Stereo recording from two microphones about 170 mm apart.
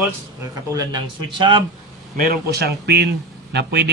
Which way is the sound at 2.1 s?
60° right (ahead or behind).